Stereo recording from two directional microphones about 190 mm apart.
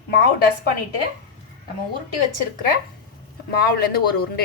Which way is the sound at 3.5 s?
55° left (ahead or behind).